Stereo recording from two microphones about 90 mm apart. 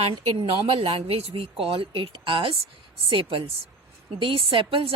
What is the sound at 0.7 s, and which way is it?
A woman's voice, 90° right.